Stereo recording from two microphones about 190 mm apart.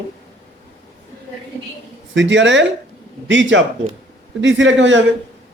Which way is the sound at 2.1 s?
75° right (ahead or behind).